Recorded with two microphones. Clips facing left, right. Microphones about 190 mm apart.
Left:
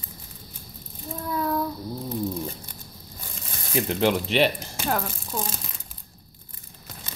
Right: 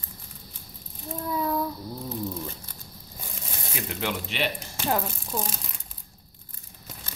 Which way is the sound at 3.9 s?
35° left (ahead or behind).